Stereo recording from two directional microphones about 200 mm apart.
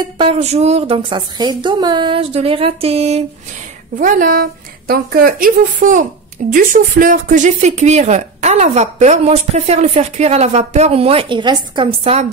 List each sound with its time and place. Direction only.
0.0 s a woman's voice: 25° right (ahead or behind)
4.0 s speech: 40° right (ahead or behind)